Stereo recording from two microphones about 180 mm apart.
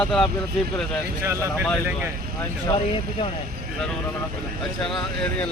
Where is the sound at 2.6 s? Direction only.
30° left (ahead or behind).